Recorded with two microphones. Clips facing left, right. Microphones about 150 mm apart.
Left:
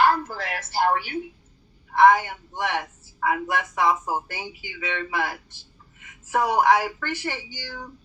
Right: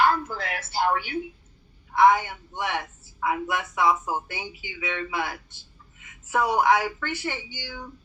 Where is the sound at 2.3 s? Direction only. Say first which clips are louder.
Left 2 dB; 40° left (ahead or behind).